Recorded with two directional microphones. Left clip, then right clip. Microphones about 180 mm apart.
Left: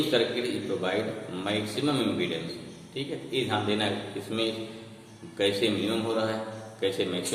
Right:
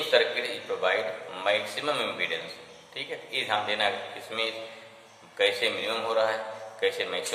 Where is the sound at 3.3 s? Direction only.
15° left (ahead or behind).